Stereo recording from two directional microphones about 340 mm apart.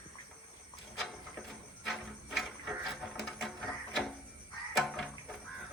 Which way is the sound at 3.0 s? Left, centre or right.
Centre.